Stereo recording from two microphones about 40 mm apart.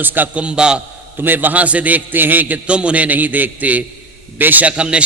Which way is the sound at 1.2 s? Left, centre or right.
Right.